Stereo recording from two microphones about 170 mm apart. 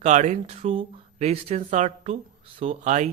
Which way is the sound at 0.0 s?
45° right (ahead or behind).